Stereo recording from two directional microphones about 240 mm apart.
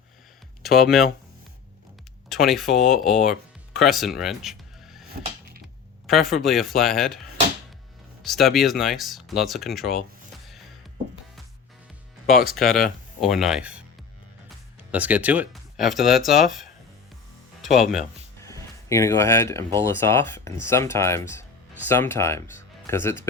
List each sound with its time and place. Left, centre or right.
0.6 s speech: centre
2.3 s speech: centre
5.2 s a sound: right
6.1 s speech: centre
8.2 s speech: centre
12.4 s speech: left
13.1 s speech: centre
14.9 s speech: centre
17.6 s music: centre
18.4 s speech: centre